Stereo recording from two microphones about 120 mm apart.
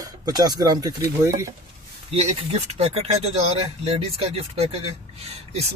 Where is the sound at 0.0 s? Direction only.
35° right (ahead or behind).